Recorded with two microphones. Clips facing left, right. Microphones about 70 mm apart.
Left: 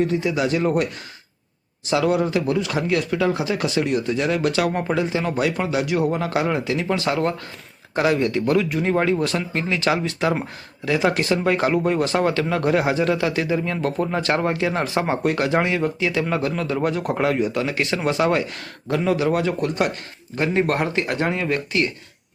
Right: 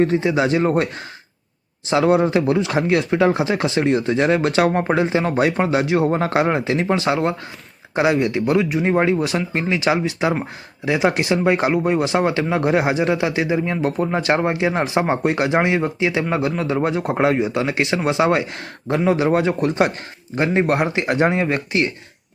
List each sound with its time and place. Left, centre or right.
0.0 s speech: right
1.9 s speech: right